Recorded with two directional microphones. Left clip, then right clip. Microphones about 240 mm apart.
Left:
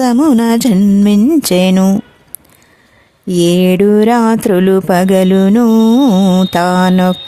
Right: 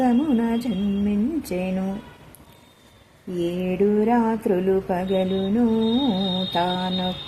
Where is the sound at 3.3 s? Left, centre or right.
Left.